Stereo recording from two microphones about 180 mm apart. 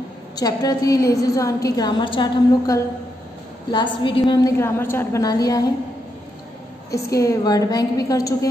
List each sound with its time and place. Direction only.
0.4 s a woman's voice: 20° left (ahead or behind)
4.3 s a woman's voice: 15° left (ahead or behind)
6.9 s a woman's voice: 15° left (ahead or behind)